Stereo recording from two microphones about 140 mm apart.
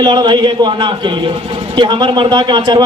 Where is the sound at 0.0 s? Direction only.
30° right (ahead or behind).